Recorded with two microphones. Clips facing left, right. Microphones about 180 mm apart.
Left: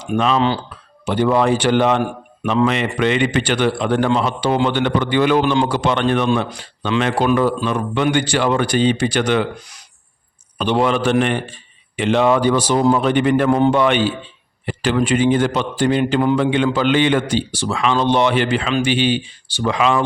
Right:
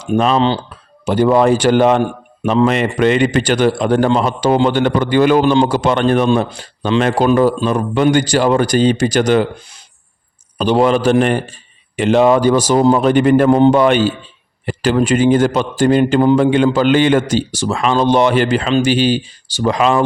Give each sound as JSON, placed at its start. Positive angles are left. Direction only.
{"t": 0.2, "sound": "a man's voice", "side_deg": -40}
{"t": 2.0, "sound": "a man's voice", "side_deg": -30}
{"t": 2.6, "sound": "a man's voice", "side_deg": -45}
{"t": 10.6, "sound": "a man's voice", "side_deg": -40}